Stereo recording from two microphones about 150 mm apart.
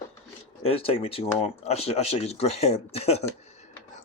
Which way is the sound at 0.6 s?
40° left (ahead or behind).